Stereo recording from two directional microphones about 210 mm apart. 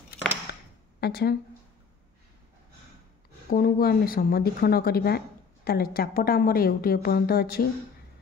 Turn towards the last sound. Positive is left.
turn(degrees=45)  # may be behind; listen again after turning